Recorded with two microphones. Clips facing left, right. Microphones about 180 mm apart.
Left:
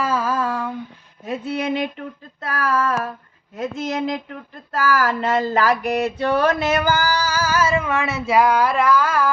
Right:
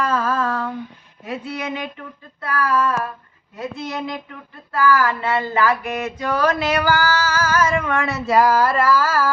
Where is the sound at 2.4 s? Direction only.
45° left (ahead or behind).